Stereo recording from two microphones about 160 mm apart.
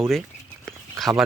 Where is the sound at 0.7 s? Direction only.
Centre (ahead or behind).